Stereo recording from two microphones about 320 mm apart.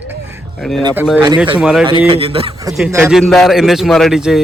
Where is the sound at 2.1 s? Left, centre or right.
Centre.